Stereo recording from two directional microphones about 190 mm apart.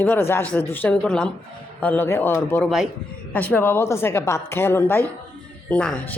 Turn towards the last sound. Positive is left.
turn(degrees=5)  # may be behind; listen again after turning